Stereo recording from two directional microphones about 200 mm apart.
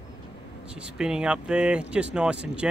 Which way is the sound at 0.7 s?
5° right (ahead or behind).